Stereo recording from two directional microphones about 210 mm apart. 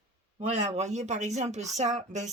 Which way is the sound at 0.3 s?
30° right (ahead or behind).